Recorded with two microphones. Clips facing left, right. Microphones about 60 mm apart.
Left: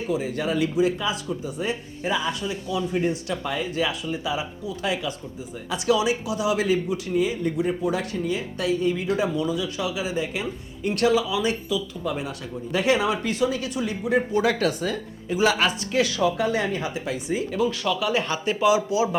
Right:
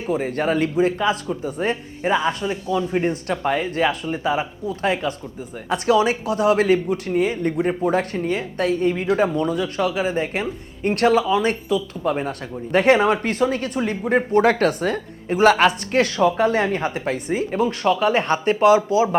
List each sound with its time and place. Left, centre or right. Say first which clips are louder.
0.1 s speech: right 5 dB; right